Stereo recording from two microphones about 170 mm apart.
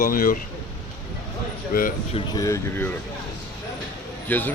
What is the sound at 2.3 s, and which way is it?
Speech, 20° left (ahead or behind).